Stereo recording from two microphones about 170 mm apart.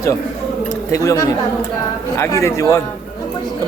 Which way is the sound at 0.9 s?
20° left (ahead or behind).